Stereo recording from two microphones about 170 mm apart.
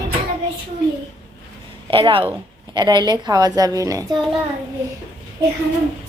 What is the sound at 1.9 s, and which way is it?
Speech, 30° right (ahead or behind).